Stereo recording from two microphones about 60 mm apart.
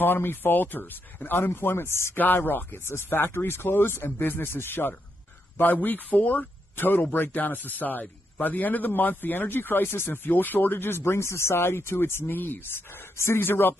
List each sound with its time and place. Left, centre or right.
0.0 s speech: left
2.1 s speech: left